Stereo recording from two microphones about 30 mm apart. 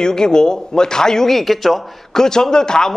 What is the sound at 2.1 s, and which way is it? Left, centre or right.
Speech, centre.